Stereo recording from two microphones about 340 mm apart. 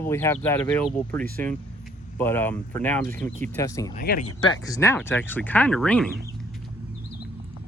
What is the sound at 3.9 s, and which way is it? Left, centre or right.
Speech, left.